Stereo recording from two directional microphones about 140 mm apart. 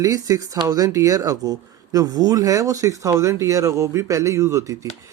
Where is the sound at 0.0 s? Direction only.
25° right (ahead or behind).